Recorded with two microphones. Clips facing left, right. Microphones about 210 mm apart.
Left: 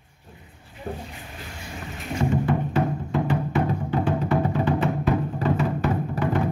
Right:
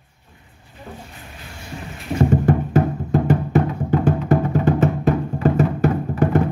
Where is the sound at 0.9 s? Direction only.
35° left (ahead or behind).